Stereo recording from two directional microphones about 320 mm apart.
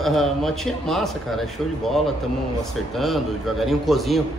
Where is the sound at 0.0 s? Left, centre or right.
Centre.